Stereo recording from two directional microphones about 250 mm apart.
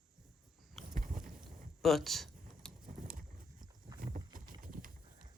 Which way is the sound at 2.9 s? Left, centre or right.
Right.